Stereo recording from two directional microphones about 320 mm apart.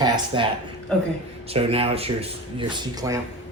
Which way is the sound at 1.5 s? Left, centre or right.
Centre.